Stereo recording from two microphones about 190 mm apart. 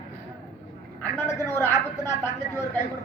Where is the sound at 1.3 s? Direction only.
15° left (ahead or behind).